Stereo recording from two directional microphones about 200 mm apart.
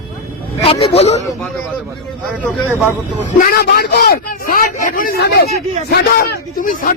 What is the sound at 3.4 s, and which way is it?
A man's voice, 50° left (ahead or behind).